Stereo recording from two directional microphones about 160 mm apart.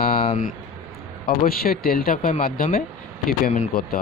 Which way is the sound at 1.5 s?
65° left (ahead or behind).